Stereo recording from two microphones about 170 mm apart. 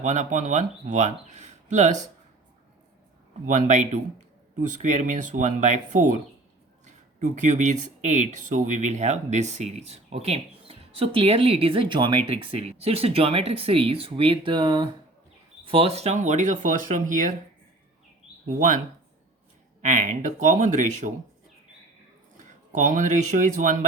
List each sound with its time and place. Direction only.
0.0 s speech: 45° right (ahead or behind)
3.4 s speech: 45° right (ahead or behind)
19.8 s speech: 45° right (ahead or behind)
22.4 s speech: 50° right (ahead or behind)